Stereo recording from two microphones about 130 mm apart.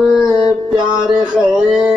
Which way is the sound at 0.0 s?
5° right (ahead or behind).